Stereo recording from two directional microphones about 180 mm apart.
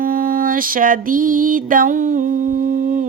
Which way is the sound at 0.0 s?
50° right (ahead or behind).